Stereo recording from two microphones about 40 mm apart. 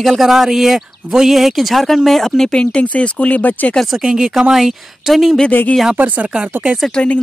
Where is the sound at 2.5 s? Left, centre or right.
Left.